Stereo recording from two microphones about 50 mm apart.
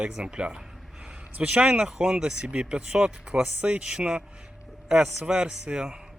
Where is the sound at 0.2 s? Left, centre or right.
Centre.